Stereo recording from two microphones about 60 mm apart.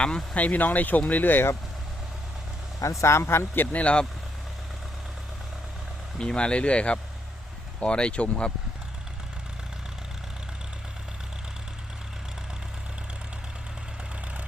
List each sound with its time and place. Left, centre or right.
0.3 s speech: left
3.0 s speech: left
6.1 s speech: centre